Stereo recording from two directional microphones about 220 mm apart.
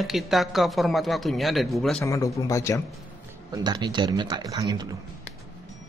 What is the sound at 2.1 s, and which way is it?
Speech, 15° left (ahead or behind).